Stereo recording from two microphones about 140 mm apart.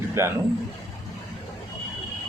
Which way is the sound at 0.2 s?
20° right (ahead or behind).